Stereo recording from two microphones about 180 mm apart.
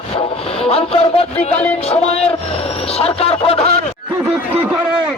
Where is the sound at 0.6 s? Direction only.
30° left (ahead or behind).